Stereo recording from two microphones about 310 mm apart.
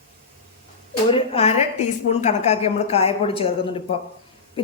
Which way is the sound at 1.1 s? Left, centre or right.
Centre.